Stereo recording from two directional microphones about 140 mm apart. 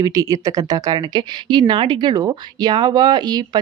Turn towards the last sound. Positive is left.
turn(degrees=-30)  # may be behind; listen again after turning